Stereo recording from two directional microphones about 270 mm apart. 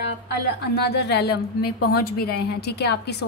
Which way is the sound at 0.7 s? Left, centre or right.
Left.